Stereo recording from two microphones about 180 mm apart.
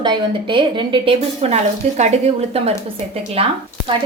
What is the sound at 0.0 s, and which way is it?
A woman's voice, 25° right (ahead or behind).